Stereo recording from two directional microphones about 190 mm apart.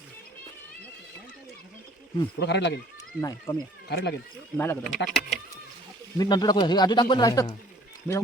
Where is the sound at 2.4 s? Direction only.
65° left (ahead or behind).